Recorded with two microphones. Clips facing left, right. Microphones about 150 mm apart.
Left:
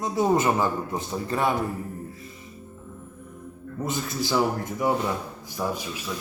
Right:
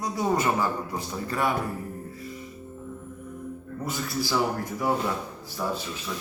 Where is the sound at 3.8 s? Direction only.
20° left (ahead or behind).